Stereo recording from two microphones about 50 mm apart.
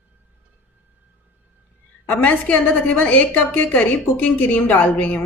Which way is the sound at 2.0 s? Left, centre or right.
Left.